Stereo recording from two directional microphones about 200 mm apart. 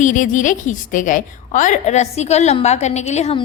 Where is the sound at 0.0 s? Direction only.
40° left (ahead or behind).